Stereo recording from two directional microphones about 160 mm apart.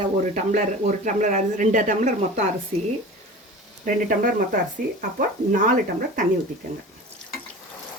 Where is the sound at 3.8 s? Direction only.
55° right (ahead or behind).